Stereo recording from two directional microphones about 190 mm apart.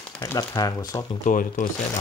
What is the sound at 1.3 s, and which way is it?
Speech, 45° left (ahead or behind).